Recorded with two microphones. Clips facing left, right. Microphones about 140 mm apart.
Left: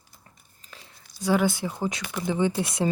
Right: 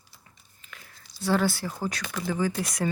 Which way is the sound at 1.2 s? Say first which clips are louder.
Left 2 dB; 15° left (ahead or behind).